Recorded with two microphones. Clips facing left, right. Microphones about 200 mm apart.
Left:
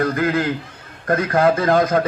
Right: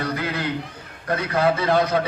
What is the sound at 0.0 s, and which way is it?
A man's voice, 50° left (ahead or behind).